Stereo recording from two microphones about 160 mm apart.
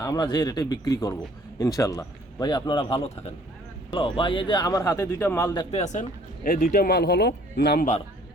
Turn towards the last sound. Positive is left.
turn(degrees=85)